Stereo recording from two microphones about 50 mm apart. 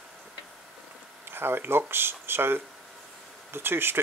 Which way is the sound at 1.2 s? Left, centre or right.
Right.